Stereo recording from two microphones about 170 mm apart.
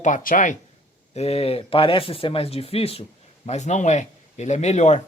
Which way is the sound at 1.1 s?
35° left (ahead or behind).